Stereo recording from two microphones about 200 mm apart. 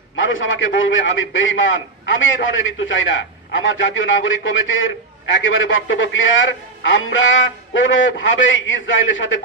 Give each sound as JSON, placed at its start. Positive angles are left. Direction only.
{"t": 0.2, "sound": "a man's voice", "side_deg": 70}